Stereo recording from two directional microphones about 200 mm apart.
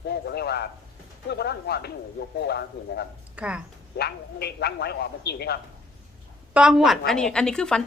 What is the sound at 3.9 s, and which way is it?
Speech, 55° left (ahead or behind).